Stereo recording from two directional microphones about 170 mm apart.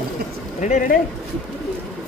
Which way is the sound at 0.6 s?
45° left (ahead or behind).